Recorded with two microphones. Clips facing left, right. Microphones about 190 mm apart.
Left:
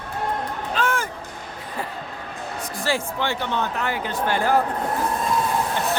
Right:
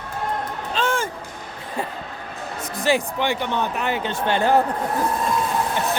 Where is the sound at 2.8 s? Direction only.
20° right (ahead or behind).